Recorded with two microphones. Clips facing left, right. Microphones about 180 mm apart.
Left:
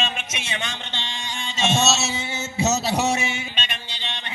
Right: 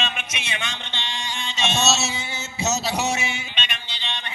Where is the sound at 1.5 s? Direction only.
45° left (ahead or behind).